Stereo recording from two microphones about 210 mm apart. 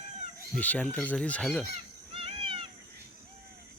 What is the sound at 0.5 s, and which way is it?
Speech, 5° left (ahead or behind).